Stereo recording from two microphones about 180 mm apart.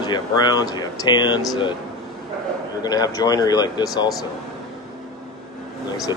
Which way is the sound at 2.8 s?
20° left (ahead or behind).